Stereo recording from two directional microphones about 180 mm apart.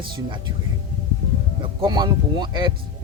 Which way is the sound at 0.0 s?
25° right (ahead or behind).